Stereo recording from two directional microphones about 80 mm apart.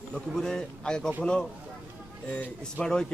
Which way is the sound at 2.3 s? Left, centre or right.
Centre.